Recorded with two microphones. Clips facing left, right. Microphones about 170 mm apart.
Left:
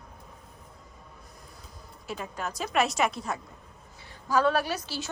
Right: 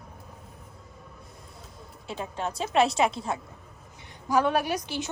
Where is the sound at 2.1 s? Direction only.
25° right (ahead or behind).